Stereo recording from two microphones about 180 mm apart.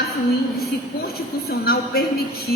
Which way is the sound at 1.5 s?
60° left (ahead or behind).